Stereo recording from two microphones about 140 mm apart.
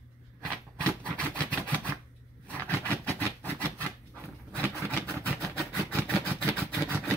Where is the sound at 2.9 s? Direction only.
20° right (ahead or behind).